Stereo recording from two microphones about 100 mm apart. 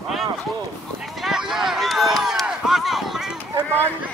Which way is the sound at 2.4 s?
5° right (ahead or behind).